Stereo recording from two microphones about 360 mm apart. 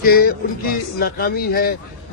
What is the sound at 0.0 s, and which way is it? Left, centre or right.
Speech, left.